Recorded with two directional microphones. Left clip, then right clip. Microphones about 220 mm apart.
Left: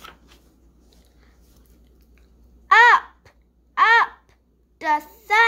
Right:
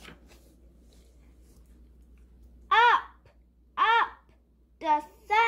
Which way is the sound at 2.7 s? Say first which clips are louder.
Left 8 dB; 25° left (ahead or behind).